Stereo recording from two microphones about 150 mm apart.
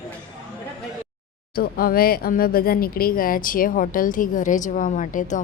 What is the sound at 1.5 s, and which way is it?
Speech, 85° left.